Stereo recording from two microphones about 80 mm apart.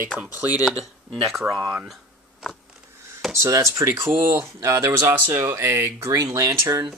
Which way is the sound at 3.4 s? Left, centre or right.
Right.